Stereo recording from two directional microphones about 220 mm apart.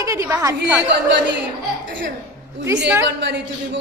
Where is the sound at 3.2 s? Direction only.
50° right (ahead or behind).